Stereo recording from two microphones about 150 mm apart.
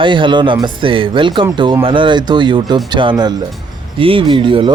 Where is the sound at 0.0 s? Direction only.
30° right (ahead or behind).